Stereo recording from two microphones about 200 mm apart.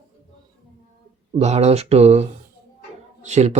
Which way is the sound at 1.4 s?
35° right (ahead or behind).